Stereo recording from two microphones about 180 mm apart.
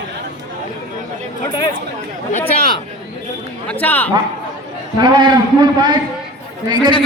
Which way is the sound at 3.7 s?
10° left (ahead or behind).